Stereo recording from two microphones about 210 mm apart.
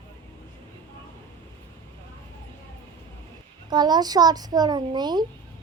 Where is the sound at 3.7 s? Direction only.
20° right (ahead or behind).